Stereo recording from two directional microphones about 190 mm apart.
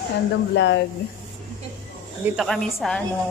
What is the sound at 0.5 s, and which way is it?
Speech, 70° left (ahead or behind).